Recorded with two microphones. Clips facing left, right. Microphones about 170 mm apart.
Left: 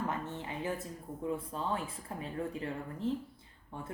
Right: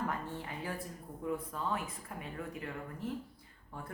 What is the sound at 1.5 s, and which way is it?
Speech, 30° left (ahead or behind).